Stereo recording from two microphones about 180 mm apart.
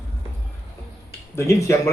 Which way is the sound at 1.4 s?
15° left (ahead or behind).